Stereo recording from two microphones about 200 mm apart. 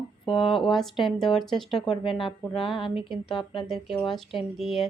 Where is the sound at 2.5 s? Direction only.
Centre (ahead or behind).